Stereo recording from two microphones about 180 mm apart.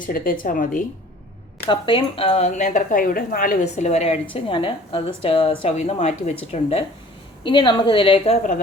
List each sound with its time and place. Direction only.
0.0 s a woman's voice: 50° left (ahead or behind)
1.6 s a woman's voice: 30° left (ahead or behind)